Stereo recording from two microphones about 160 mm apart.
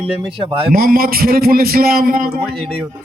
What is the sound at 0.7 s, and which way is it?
A man's voice, 65° right (ahead or behind).